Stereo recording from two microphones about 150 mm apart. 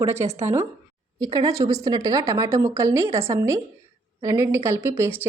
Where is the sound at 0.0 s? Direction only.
20° right (ahead or behind).